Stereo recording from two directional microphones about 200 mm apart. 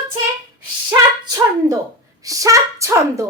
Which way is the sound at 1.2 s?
15° right (ahead or behind).